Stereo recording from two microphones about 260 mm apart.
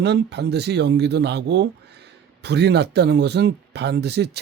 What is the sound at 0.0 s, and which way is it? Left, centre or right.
Speech, right.